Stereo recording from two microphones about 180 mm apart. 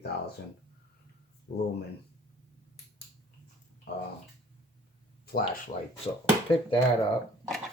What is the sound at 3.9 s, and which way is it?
Speech, 65° left (ahead or behind).